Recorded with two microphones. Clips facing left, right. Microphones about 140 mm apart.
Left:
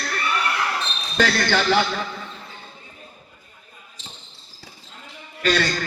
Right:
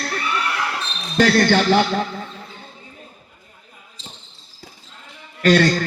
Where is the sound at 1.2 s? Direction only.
45° right (ahead or behind).